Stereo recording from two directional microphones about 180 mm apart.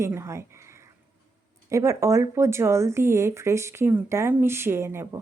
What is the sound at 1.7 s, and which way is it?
Speech, 15° right (ahead or behind).